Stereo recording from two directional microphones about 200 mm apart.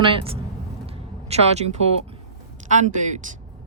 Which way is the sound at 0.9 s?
30° right (ahead or behind).